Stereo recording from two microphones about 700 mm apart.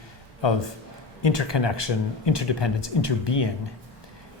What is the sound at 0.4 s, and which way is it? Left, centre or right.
Speech, left.